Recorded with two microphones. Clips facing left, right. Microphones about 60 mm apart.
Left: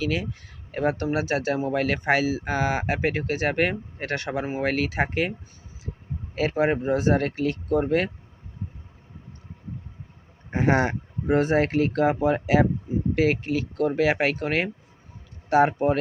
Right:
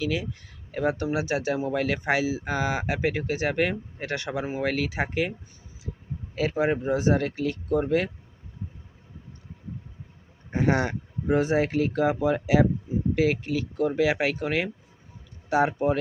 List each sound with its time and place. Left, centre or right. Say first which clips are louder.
0.0 s speech: left 1 dB; left
2.4 s speech: left 2 dB; left
2.6 s speech: left 1 dB; left
3.5 s speech: left 1 dB; left
4.0 s speech: left 2 dB; left
4.4 s speech: left 2 dB; left
6.3 s speech: left 2 dB; left
10.5 s speech: left 2 dB; left